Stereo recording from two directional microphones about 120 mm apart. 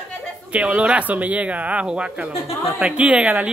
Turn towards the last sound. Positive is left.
turn(degrees=-10)  # may be behind; listen again after turning